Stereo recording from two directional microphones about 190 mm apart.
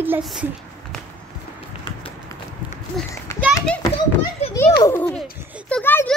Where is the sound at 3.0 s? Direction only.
Centre (ahead or behind).